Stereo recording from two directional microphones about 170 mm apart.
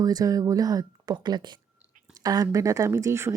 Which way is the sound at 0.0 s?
20° right (ahead or behind).